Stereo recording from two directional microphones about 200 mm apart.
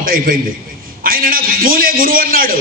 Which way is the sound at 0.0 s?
45° right (ahead or behind).